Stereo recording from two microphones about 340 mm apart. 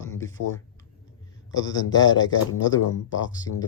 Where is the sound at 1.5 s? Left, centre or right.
Left.